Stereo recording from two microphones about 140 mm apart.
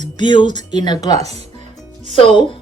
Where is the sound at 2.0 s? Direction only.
40° left (ahead or behind).